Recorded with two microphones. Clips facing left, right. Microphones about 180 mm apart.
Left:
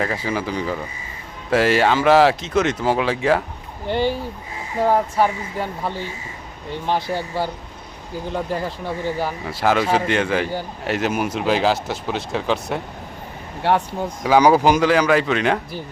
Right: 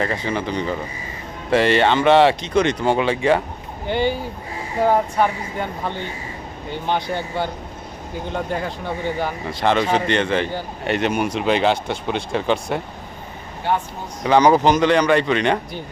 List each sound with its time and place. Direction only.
0.0 s a man's voice: 5° left (ahead or behind)
13.6 s speech: 75° left (ahead or behind)
14.3 s a man's voice: 5° left (ahead or behind)